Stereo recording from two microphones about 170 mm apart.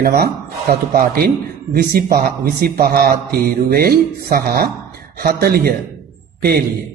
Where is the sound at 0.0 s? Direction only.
65° right (ahead or behind).